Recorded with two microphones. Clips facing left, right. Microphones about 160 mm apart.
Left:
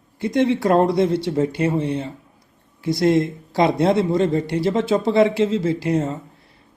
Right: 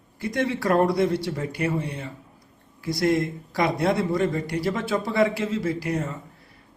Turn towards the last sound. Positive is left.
turn(degrees=25)  # may be behind; listen again after turning